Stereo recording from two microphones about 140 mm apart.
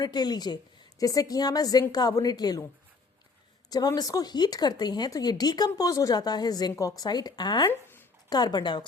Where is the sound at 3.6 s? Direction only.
30° left (ahead or behind).